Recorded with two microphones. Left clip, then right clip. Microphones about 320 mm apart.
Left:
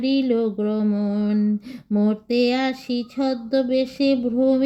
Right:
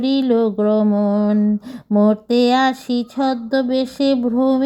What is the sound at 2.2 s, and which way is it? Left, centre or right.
Female singing, centre.